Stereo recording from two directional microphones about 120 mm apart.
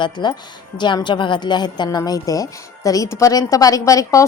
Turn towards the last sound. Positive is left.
turn(degrees=30)  # may be behind; listen again after turning